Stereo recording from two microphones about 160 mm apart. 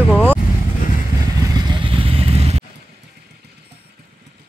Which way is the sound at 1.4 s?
25° right (ahead or behind).